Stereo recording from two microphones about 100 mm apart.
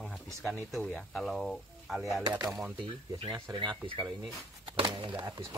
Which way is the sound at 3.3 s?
45° right (ahead or behind).